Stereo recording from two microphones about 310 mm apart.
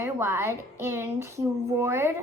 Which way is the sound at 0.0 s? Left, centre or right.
Centre.